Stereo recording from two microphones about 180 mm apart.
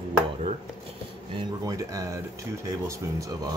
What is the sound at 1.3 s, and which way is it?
Speech, 25° right (ahead or behind).